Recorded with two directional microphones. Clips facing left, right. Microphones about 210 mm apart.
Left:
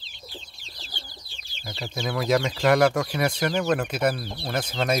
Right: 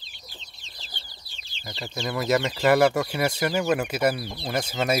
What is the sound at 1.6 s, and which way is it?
Speech, centre (ahead or behind).